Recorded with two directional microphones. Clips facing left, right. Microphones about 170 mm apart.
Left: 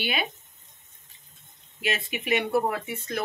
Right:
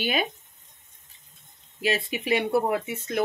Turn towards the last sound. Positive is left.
turn(degrees=-20)  # may be behind; listen again after turning